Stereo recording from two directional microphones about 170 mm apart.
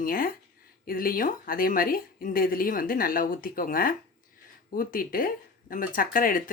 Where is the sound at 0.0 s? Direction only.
55° left (ahead or behind).